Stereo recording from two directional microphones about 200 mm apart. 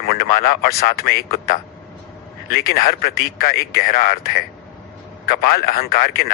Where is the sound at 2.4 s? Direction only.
50° left (ahead or behind).